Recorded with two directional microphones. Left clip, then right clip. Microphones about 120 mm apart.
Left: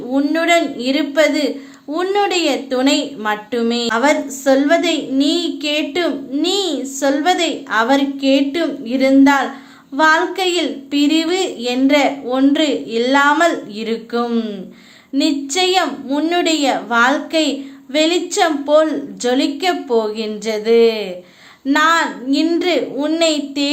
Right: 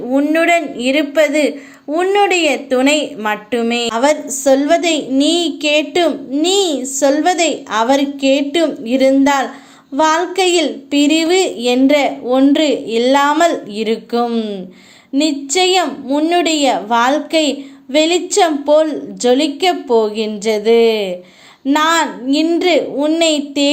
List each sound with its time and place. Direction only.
0.1 s a woman's voice: 15° right (ahead or behind)
3.9 s a woman's voice: 40° right (ahead or behind)
16.0 s a woman's voice: 20° right (ahead or behind)